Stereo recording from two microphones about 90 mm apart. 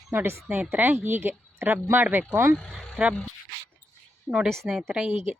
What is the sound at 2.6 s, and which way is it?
Speech, 5° left (ahead or behind).